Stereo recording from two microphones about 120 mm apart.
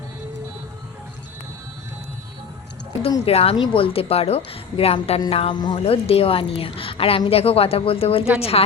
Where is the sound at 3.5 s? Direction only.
45° left (ahead or behind).